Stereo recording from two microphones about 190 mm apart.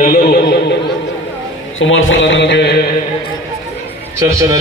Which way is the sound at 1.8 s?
85° left.